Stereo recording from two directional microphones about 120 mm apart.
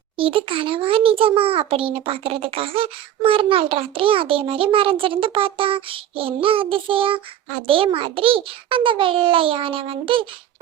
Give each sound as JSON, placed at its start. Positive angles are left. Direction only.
{"t": 0.2, "sound": "a child's voice", "side_deg": -50}